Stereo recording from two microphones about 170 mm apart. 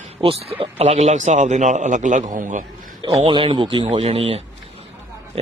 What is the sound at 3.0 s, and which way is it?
Speech, 35° right (ahead or behind).